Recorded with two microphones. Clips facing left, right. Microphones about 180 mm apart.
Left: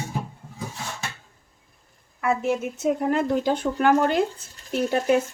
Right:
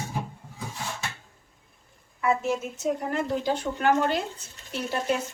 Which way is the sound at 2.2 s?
55° left (ahead or behind).